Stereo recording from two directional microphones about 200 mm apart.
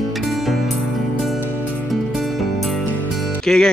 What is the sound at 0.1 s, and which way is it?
Music, centre (ahead or behind).